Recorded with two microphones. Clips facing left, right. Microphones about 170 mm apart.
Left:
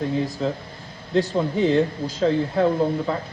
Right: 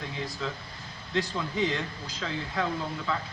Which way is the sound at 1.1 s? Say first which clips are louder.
Left 9 dB; 45° left (ahead or behind).